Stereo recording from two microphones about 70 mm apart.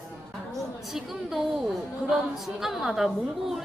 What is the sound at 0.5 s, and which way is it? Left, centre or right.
A woman's voice, centre.